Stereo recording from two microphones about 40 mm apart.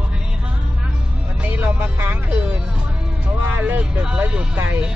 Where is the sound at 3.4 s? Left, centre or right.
Right.